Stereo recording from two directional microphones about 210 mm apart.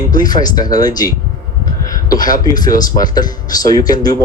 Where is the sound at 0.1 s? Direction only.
20° left (ahead or behind).